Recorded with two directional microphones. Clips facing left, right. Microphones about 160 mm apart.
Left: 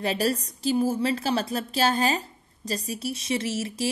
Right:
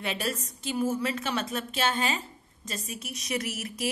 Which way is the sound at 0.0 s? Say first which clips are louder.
Left 7 dB; 35° left (ahead or behind).